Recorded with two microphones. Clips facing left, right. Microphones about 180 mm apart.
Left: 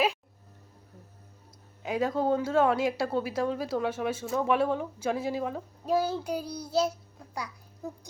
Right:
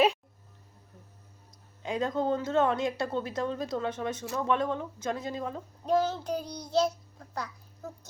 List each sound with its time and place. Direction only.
1.8 s speech: 5° left (ahead or behind)